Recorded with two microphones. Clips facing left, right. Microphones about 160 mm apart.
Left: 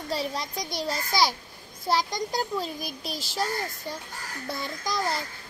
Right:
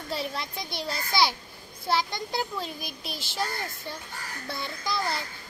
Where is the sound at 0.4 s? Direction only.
40° left (ahead or behind).